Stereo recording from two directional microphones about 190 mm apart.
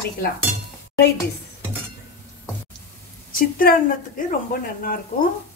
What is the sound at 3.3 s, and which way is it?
Speech, 50° left (ahead or behind).